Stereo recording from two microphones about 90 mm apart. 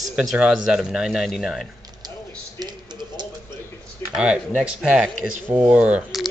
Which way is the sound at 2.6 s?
55° right (ahead or behind).